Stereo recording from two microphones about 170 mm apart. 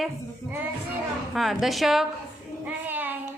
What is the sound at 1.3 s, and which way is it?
Speech, centre (ahead or behind).